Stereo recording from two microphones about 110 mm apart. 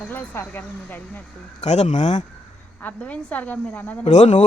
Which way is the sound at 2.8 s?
15° left (ahead or behind).